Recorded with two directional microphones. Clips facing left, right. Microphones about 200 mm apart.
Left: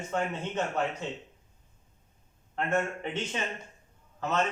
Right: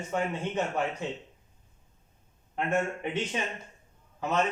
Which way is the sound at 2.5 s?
15° right (ahead or behind).